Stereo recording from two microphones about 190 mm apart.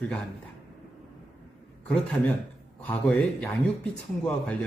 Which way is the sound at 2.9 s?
5° left (ahead or behind).